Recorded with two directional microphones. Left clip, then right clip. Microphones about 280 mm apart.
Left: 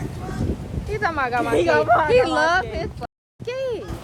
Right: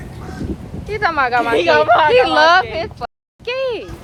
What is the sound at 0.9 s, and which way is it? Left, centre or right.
A woman's voice, right.